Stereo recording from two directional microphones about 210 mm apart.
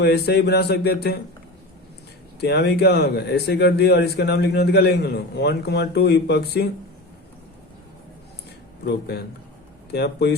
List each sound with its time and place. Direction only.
0.0 s a man's voice: 50° left (ahead or behind)
2.4 s a man's voice: 50° left (ahead or behind)
8.8 s a man's voice: 50° left (ahead or behind)